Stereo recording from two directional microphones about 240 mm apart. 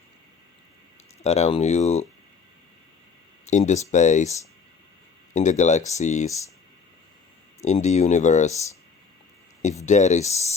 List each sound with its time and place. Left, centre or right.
1.2 s speech: left
3.4 s speech: left
7.6 s speech: left
9.8 s speech: left